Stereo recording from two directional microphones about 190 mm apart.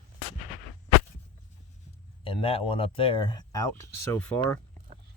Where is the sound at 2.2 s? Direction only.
30° left (ahead or behind); by 4.6 s 10° left (ahead or behind).